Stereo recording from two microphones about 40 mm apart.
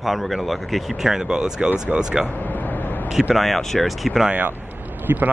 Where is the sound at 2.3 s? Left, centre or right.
Left.